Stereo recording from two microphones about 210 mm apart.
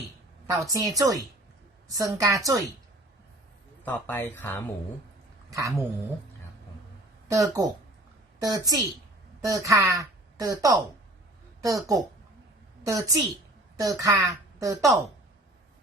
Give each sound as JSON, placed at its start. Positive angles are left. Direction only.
{"t": 0.6, "sound": "a woman's voice", "side_deg": -15}
{"t": 3.8, "sound": "speech", "side_deg": 10}
{"t": 5.5, "sound": "speech", "side_deg": -15}
{"t": 7.3, "sound": "a woman's voice", "side_deg": -15}